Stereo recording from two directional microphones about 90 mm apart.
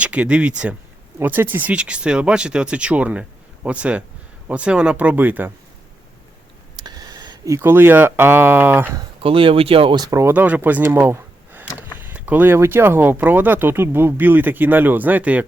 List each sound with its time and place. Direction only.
0.0 s speech: 15° right (ahead or behind)
1.2 s speech: 20° right (ahead or behind)
6.7 s a sound: 50° right (ahead or behind)
7.4 s speech: 30° right (ahead or behind)
9.2 s speech: 85° right
9.9 s speech: 45° right (ahead or behind)
10.2 s speech: 25° right (ahead or behind)